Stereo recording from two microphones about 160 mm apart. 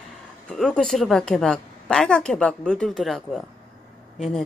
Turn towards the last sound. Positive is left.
turn(degrees=0)  # may be behind; listen again after turning